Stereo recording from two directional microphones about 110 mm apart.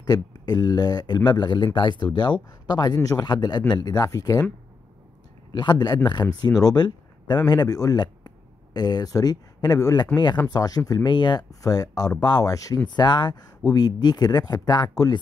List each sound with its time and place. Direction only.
0.5 s speech: 40° left (ahead or behind)
5.5 s speech: 40° left (ahead or behind)